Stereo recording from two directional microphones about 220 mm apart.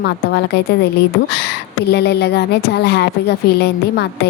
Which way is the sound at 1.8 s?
50° left (ahead or behind).